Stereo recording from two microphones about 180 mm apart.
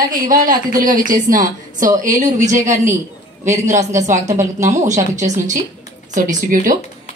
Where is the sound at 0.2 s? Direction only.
50° right (ahead or behind).